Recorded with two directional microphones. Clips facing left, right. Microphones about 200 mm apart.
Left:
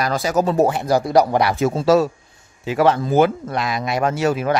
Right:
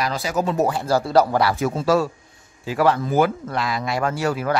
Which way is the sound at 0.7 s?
15° left (ahead or behind).